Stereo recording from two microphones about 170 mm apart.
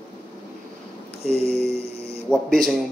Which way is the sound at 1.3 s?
40° right (ahead or behind).